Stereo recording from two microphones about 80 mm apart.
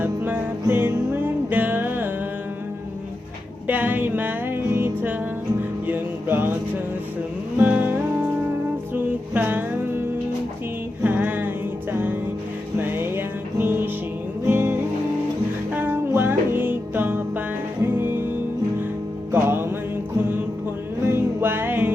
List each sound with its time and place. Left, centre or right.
0.0 s music: right
3.7 s music: right
7.6 s music: right
9.3 s music: right
11.0 s music: right
19.3 s music: right
21.1 s music: right